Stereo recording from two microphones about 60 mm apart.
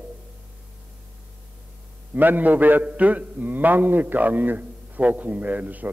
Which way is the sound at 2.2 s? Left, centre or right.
Right.